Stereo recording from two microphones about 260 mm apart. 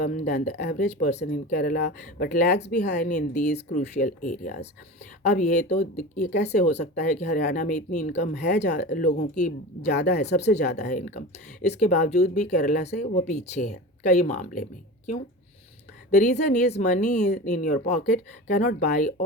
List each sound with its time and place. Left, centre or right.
0.0 s speech: left
2.8 s speech: left
3.1 s speech: left
7.3 s speech: left
8.9 s speech: left
9.9 s speech: left